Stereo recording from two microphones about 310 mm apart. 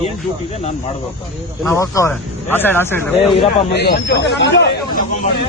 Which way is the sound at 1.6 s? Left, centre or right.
Centre.